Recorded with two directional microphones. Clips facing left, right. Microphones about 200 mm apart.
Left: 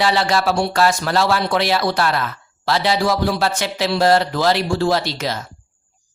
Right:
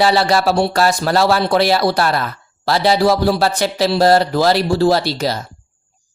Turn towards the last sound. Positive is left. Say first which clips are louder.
# right 4 dB
turn(degrees=-35)  # may be behind; listen again after turning